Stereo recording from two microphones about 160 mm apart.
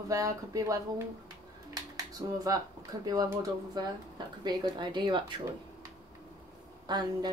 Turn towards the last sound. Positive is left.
turn(degrees=-25)  # may be behind; listen again after turning